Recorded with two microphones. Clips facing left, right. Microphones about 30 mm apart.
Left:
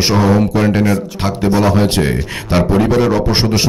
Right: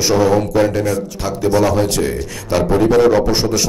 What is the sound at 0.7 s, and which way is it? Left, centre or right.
A man's voice, left.